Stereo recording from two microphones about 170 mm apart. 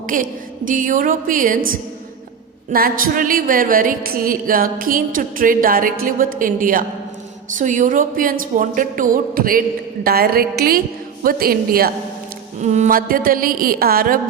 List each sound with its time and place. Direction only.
0.1 s a woman's voice: 50° right (ahead or behind)
12.5 s speech: 45° right (ahead or behind)